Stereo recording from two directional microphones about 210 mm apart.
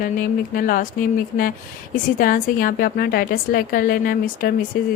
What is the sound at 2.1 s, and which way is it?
A woman's voice, 40° left (ahead or behind).